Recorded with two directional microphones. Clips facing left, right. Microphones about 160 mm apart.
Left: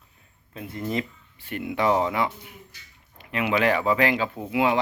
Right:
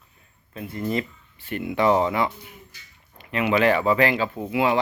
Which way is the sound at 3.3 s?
10° left (ahead or behind).